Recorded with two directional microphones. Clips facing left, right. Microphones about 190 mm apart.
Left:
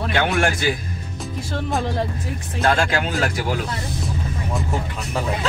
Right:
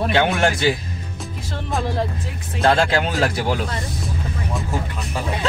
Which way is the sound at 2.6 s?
30° right (ahead or behind).